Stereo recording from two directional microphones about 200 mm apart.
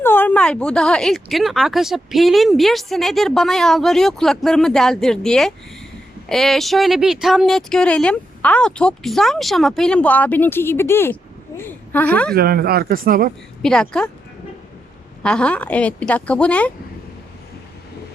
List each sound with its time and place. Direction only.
0.0 s speech: 10° left (ahead or behind)
12.3 s speech: 50° right (ahead or behind)
13.6 s speech: 5° left (ahead or behind)
15.2 s a woman's voice: 5° left (ahead or behind)